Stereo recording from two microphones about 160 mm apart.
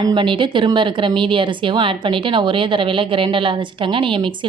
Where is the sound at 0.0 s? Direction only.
30° right (ahead or behind).